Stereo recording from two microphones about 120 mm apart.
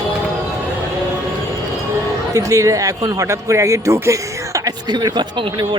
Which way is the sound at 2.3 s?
25° right (ahead or behind).